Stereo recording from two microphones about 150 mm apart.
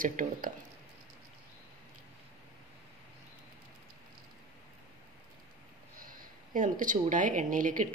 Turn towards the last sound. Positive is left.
turn(degrees=-60)  # may be behind; listen again after turning